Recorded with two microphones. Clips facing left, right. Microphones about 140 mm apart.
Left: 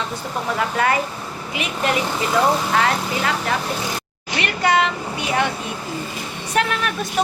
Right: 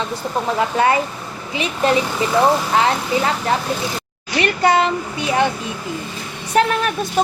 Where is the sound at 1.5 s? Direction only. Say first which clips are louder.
Right 4 dB; 30° right (ahead or behind).